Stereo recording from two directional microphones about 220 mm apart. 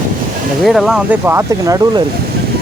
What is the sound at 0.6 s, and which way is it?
Speech, centre (ahead or behind).